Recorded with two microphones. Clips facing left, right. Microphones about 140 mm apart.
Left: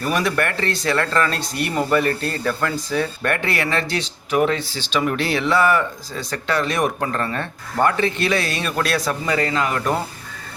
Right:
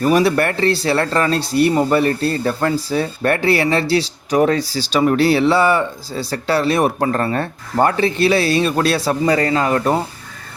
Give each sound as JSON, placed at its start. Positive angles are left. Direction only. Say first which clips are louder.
{"t": 0.1, "sound": "speech", "louder": "right 5 dB", "side_deg": -35}